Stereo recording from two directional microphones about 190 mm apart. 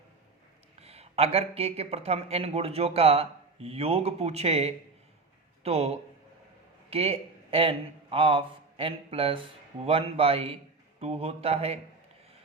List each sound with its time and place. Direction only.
0.8 s speech: 35° right (ahead or behind)